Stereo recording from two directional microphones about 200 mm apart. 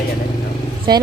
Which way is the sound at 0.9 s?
20° right (ahead or behind).